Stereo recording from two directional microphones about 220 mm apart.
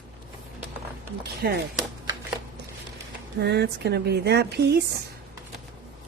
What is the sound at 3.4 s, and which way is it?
Speech, 50° right (ahead or behind).